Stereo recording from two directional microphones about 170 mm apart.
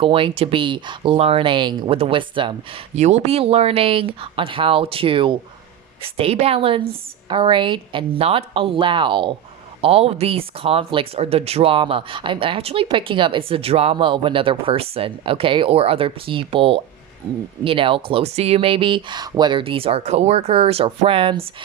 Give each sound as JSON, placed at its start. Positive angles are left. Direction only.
{"t": 0.0, "sound": "speech", "side_deg": -30}